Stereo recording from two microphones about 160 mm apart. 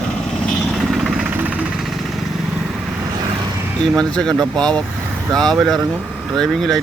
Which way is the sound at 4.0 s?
5° left (ahead or behind).